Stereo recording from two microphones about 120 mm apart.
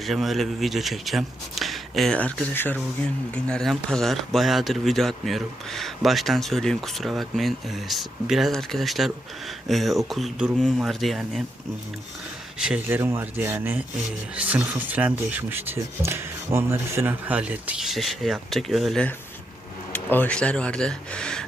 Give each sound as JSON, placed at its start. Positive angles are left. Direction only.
{"t": 0.0, "sound": "speech", "side_deg": 0}
{"t": 2.1, "sound": "speech", "side_deg": 15}
{"t": 3.3, "sound": "speech", "side_deg": 5}
{"t": 12.5, "sound": "speech", "side_deg": -5}
{"t": 12.9, "sound": "speech", "side_deg": -20}
{"t": 17.8, "sound": "speech", "side_deg": 0}
{"t": 19.9, "sound": "speech", "side_deg": 15}